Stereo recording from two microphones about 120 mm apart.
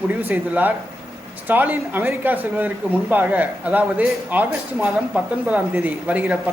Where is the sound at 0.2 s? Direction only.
15° right (ahead or behind).